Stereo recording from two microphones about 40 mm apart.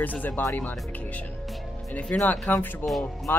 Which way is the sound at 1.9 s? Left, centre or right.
Left.